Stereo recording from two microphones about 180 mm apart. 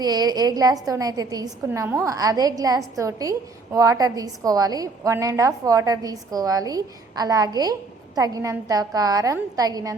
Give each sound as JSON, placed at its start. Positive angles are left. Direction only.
{"t": 0.0, "sound": "a woman's voice", "side_deg": -20}